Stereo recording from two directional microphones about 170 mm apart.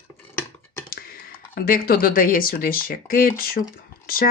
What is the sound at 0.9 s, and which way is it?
Speech, 60° left (ahead or behind).